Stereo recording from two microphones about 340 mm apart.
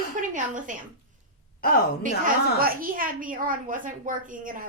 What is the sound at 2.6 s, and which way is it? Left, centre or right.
A woman's voice, right.